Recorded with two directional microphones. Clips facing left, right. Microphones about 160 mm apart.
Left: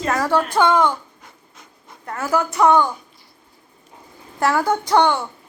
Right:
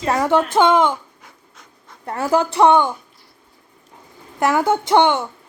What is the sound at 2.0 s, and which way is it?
Speech, 30° right (ahead or behind).